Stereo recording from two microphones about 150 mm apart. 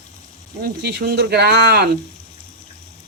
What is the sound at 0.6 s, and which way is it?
Speech, 90° right.